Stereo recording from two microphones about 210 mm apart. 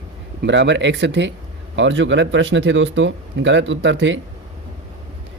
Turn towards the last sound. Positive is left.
turn(degrees=-60)  # may be behind; listen again after turning